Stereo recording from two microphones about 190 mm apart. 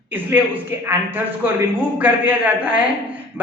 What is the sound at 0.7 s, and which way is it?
Speech, 10° right (ahead or behind).